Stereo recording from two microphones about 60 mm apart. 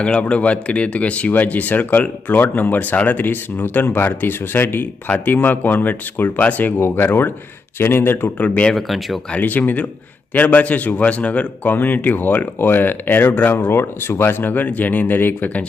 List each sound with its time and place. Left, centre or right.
0.0 s speech: centre
6.7 s speech: left
8.7 s speech: centre
9.4 s speech: left